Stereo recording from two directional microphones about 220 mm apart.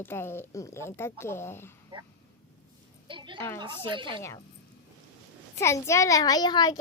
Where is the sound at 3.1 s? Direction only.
20° right (ahead or behind).